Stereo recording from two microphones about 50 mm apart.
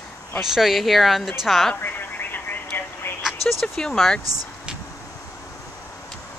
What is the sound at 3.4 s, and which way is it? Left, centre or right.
Speech, centre.